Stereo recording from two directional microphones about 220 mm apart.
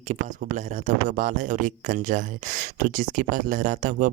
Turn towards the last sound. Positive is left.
turn(degrees=-35)  # may be behind; listen again after turning